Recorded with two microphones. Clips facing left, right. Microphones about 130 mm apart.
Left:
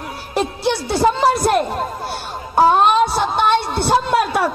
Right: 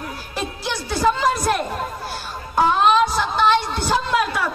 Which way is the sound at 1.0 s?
35° left (ahead or behind).